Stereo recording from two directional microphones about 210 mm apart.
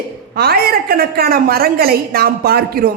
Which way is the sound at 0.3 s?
45° right (ahead or behind).